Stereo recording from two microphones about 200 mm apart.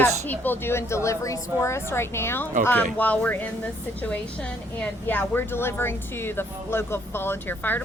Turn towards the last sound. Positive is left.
turn(degrees=10)  # may be behind; listen again after turning